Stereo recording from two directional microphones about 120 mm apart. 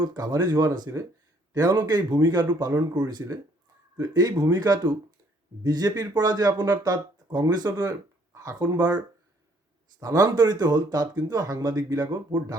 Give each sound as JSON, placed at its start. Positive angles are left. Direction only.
{"t": 0.0, "sound": "speech", "side_deg": -35}